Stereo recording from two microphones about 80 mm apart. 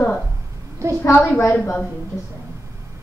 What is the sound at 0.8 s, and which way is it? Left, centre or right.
Speech, right.